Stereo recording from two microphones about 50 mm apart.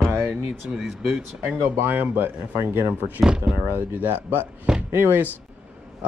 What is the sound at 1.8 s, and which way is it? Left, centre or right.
Speech, right.